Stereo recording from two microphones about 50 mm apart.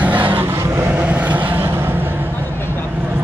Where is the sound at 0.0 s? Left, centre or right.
Right.